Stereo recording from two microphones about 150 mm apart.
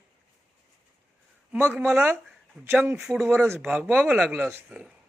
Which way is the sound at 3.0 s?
Centre (ahead or behind).